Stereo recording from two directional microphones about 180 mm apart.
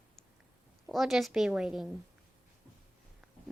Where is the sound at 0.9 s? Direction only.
Centre (ahead or behind).